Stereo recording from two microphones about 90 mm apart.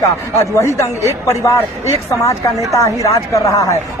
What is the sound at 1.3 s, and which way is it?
A man's voice, 35° left (ahead or behind).